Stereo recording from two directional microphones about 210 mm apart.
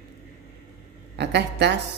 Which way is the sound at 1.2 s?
55° right (ahead or behind).